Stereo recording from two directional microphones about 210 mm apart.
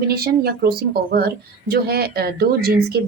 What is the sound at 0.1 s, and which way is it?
Speech, 45° right (ahead or behind).